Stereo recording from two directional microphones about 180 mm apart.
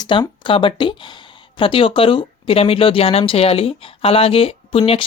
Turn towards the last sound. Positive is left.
turn(degrees=30)  # may be behind; listen again after turning